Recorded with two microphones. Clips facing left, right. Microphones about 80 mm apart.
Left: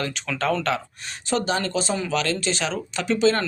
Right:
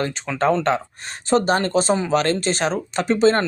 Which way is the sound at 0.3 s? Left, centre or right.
Right.